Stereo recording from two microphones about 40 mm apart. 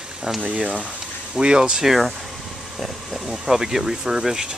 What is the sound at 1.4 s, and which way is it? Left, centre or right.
Speech, right.